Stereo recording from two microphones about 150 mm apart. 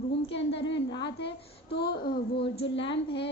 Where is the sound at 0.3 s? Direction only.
35° left (ahead or behind).